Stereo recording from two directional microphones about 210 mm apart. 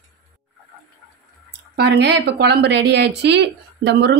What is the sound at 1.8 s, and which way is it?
Speech, 55° right (ahead or behind).